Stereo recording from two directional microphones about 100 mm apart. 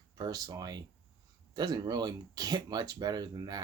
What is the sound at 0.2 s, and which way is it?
Speech, 40° right (ahead or behind).